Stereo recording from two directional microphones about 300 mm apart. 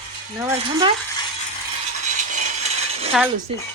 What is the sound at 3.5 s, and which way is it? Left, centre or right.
Speech, centre.